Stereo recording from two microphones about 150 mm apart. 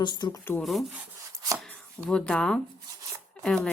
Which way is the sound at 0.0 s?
30° left (ahead or behind).